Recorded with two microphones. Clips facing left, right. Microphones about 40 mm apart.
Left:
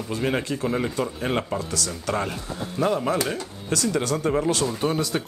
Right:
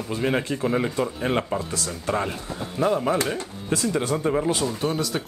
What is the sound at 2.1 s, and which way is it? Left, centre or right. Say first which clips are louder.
Speech: right 1 dB; centre.